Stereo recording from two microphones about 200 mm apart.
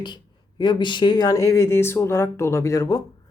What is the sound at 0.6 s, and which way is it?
Speech, 20° left (ahead or behind).